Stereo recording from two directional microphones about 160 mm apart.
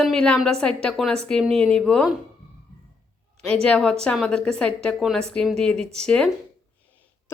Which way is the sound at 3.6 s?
5° left (ahead or behind).